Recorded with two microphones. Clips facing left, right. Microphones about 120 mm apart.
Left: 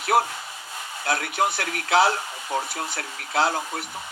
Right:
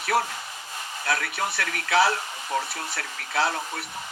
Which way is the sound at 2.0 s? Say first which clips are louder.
Left 1 dB; 30° left (ahead or behind).